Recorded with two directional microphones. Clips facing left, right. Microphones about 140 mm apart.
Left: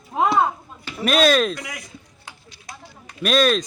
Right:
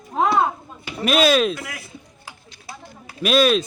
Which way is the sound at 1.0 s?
5° right (ahead or behind).